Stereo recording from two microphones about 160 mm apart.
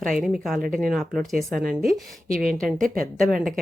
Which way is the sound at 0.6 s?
60° right (ahead or behind).